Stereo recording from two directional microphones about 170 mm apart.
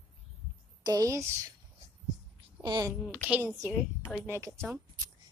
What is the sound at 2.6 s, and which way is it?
Speech, 25° right (ahead or behind).